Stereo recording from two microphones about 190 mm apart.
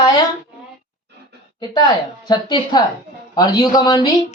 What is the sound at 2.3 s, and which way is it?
Speech, 20° left (ahead or behind).